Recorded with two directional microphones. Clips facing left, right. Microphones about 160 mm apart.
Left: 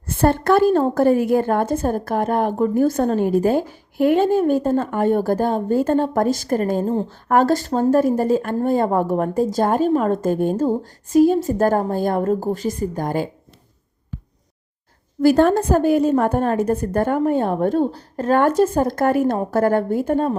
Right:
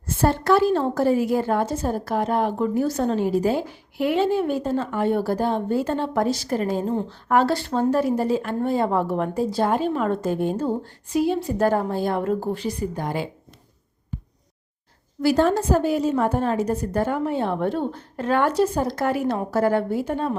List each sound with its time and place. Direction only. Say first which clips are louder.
0.0 s a woman's voice: left 4 dB; 60° left (ahead or behind)
15.2 s a woman's voice: left 5 dB; 50° left (ahead or behind)